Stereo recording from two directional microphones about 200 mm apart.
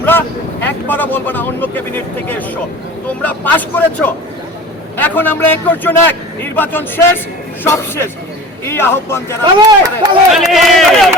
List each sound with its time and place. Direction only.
0.0 s speech: 10° left (ahead or behind)
9.6 s speech: 20° right (ahead or behind)
10.3 s speech: centre (ahead or behind)